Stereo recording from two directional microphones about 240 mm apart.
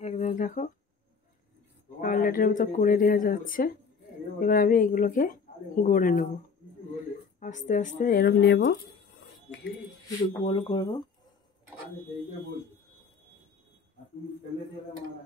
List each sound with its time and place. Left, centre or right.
0.0 s a sound: left
2.0 s speech: left
7.3 s speech: left
10.4 s speech: left